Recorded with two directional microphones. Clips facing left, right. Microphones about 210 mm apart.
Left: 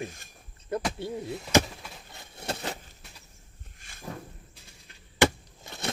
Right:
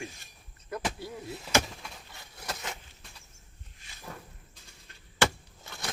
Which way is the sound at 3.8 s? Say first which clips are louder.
Left 1 dB; 50° left (ahead or behind).